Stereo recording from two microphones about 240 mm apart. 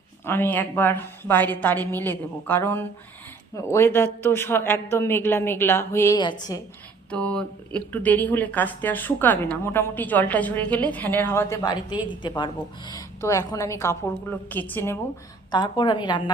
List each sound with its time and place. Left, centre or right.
0.3 s a woman's voice: centre
7.1 s a woman's voice: centre